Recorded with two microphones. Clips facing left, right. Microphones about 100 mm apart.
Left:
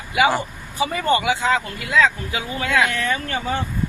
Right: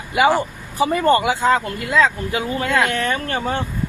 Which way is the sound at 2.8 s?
50° right (ahead or behind).